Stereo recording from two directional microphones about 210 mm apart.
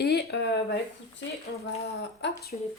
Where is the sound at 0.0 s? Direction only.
50° left (ahead or behind).